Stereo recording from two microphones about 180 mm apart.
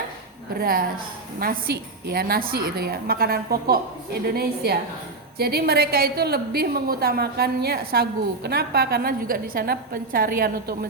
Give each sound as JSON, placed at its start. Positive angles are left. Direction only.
{"t": 0.6, "sound": "a woman's voice", "side_deg": -55}